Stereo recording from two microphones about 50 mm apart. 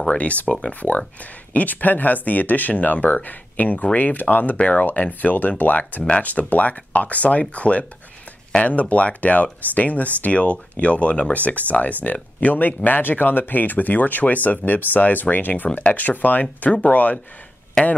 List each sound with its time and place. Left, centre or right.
0.1 s speech: left
17.8 s speech: centre